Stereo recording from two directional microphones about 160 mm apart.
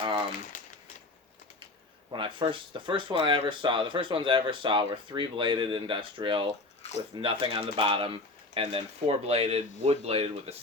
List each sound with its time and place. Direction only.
2.1 s speech: 30° right (ahead or behind)